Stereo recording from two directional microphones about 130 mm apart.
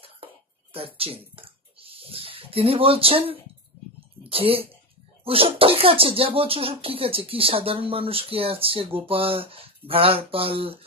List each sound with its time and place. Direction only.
0.7 s speech: 45° right (ahead or behind)